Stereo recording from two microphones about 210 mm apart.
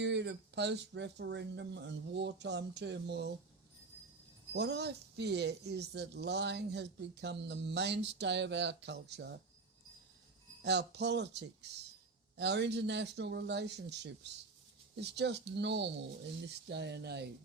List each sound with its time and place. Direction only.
0.0 s speech: 55° right (ahead or behind)
4.5 s speech: 55° right (ahead or behind)
10.6 s speech: 55° right (ahead or behind)
15.1 s speech: 55° right (ahead or behind)